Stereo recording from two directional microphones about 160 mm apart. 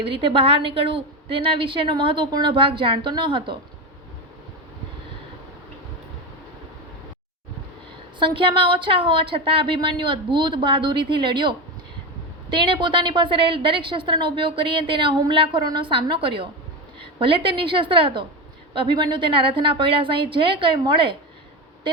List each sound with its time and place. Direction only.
0.0 s a woman's voice: 35° right (ahead or behind)
8.2 s a woman's voice: 30° right (ahead or behind)